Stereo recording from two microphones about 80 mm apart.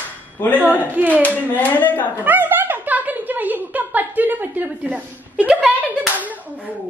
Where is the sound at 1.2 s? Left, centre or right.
Centre.